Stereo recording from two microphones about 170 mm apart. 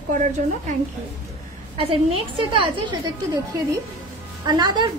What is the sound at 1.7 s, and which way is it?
A woman's voice, 35° right (ahead or behind).